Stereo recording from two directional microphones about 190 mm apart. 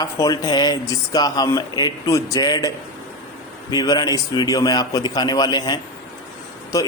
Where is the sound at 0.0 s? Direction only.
20° left (ahead or behind).